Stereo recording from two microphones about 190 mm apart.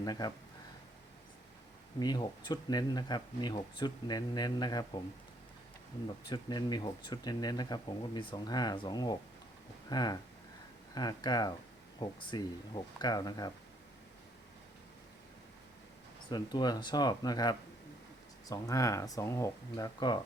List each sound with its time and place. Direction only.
0.0 s speech: 20° left (ahead or behind)
2.0 s speech: 20° left (ahead or behind)
6.2 s speech: 20° left (ahead or behind)
16.3 s speech: 20° left (ahead or behind)